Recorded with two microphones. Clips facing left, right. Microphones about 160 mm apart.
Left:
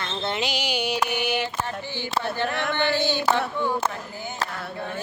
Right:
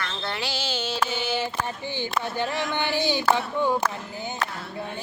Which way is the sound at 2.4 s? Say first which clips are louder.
Left 1 dB; 60° left (ahead or behind).